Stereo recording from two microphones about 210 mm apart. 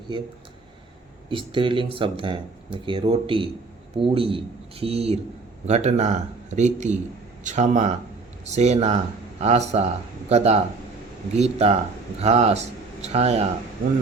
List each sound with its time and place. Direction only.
1.3 s speech: 25° right (ahead or behind)